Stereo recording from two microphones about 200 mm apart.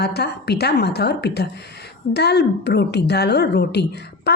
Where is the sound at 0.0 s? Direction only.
55° left (ahead or behind).